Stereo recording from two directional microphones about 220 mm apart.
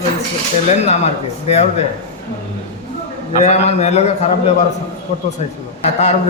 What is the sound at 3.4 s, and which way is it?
Speech, 30° left (ahead or behind).